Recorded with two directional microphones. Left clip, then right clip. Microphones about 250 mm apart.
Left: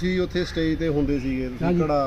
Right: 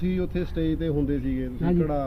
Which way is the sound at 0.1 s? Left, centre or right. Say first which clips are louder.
Left 6 dB; centre.